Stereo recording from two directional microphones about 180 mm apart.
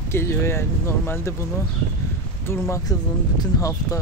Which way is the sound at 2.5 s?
20° left (ahead or behind).